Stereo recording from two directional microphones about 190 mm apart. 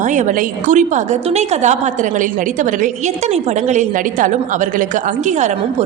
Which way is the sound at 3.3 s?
40° right (ahead or behind).